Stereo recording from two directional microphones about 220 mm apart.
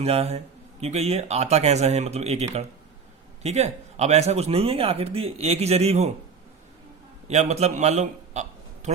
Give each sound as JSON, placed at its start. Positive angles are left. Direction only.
{"t": 0.0, "sound": "speech", "side_deg": -25}
{"t": 7.3, "sound": "a man's voice", "side_deg": -30}